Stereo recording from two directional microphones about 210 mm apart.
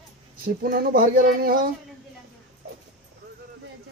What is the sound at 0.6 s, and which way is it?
Speech, 45° right (ahead or behind).